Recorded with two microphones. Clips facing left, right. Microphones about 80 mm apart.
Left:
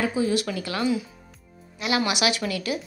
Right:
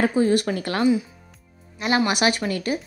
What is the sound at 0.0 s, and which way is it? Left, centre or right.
A woman's voice, right.